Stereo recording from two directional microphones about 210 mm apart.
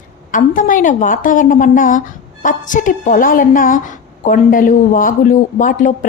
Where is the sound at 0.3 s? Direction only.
40° left (ahead or behind).